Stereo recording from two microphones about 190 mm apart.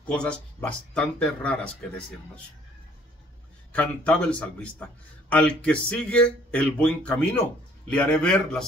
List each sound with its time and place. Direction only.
0.0 s speech: 5° left (ahead or behind)
3.7 s speech: 5° left (ahead or behind)